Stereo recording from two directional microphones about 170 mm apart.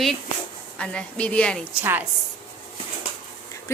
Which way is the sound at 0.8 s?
5° left (ahead or behind).